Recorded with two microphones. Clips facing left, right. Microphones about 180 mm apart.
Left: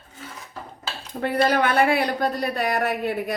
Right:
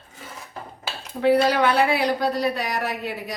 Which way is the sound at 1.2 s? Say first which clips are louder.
Right 3 dB; 50° left (ahead or behind).